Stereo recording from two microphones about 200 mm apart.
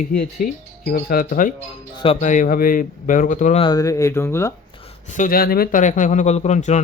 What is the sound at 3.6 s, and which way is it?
Speech, 20° left (ahead or behind).